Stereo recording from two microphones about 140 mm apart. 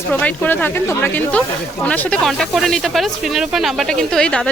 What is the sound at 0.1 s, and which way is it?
Speech, 10° left (ahead or behind).